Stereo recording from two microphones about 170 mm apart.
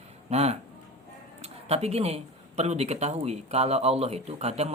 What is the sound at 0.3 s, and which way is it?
Speech, 40° right (ahead or behind).